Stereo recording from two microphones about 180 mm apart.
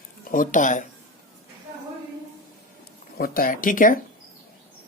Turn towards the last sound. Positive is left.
turn(degrees=50)  # may be behind; listen again after turning